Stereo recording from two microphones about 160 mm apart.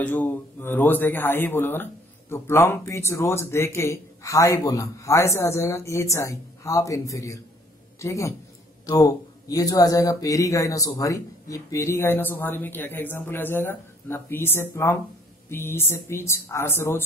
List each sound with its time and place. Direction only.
0.0 s a woman's voice: 10° left (ahead or behind)